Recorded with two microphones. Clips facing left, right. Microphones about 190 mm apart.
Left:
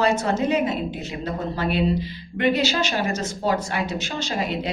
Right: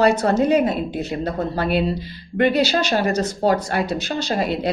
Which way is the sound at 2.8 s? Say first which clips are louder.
Right 5 dB; 35° right (ahead or behind).